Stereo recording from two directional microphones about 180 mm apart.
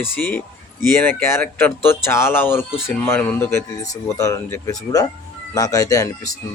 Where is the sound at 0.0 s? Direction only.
10° left (ahead or behind).